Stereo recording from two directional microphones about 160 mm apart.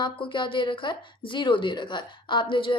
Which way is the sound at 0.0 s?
30° left (ahead or behind).